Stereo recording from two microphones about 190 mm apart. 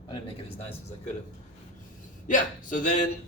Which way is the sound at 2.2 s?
45° left (ahead or behind).